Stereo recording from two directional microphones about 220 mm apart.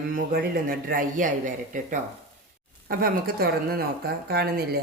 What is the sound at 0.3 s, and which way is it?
A man's voice, 40° right (ahead or behind).